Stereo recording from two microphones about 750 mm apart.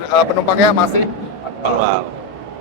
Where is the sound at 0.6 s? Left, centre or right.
Left.